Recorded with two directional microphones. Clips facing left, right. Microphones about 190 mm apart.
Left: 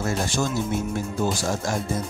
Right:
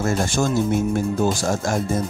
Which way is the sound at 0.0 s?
50° right (ahead or behind).